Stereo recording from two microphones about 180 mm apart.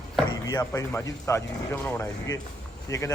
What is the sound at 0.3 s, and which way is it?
A man's voice, 20° left (ahead or behind).